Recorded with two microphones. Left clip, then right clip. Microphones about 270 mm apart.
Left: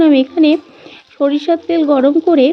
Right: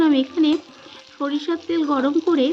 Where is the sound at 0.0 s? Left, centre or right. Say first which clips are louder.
Left 8 dB; centre.